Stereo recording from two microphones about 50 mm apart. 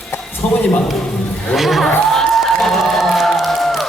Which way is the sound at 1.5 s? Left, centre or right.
Centre.